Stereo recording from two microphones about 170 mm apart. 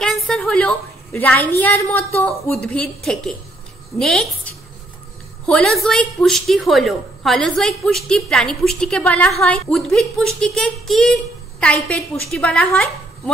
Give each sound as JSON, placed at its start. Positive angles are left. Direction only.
{"t": 0.0, "sound": "a woman's voice", "side_deg": 5}